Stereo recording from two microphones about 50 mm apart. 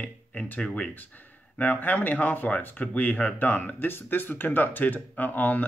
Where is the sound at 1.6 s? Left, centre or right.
Left.